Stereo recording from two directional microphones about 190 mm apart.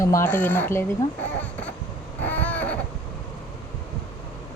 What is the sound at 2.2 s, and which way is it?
Baby cry, 10° left (ahead or behind).